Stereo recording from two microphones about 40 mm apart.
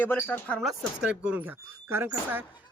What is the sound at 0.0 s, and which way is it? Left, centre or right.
Speech, left.